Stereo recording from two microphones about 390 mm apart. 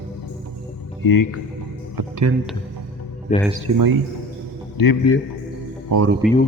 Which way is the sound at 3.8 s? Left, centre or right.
Right.